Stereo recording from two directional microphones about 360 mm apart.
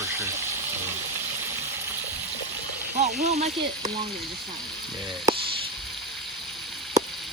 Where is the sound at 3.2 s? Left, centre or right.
Centre.